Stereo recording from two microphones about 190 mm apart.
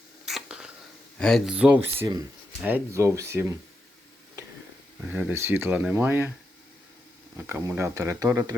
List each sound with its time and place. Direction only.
0.3 s a sound: centre (ahead or behind)
1.2 s speech: centre (ahead or behind); by 3.6 s 15° right (ahead or behind)
4.9 s speech: 5° right (ahead or behind)
7.3 s speech: 10° right (ahead or behind)